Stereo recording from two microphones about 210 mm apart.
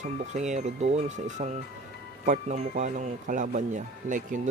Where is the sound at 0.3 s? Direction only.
35° right (ahead or behind).